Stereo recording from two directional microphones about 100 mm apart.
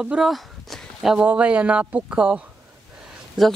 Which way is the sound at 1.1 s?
15° right (ahead or behind).